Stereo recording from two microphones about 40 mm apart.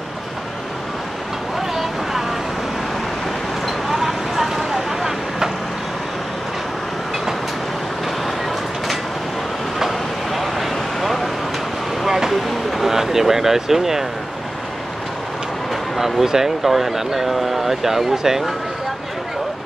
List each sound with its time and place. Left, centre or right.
3.6 s vehicle: centre
9.8 s vehicle: centre
12.0 s a sound: centre
12.4 s vehicle: centre
15.7 s a sound: centre
16.3 s speech: centre